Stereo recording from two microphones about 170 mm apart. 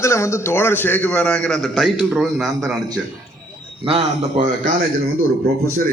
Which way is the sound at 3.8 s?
35° right (ahead or behind).